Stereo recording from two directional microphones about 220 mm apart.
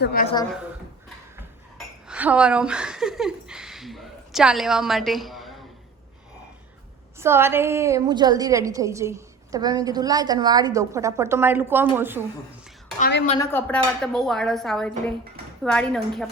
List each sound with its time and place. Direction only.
0.0 s a woman's voice: 45° left (ahead or behind)
2.0 s speech: 5° right (ahead or behind)
7.2 s a woman's voice: 10° right (ahead or behind)
13.0 s a woman's voice: 50° left (ahead or behind)
13.4 s a woman's voice: 10° left (ahead or behind)